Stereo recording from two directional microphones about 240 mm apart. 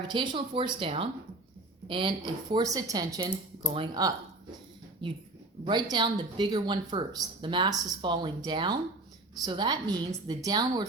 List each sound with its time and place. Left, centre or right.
0.1 s a woman's voice: centre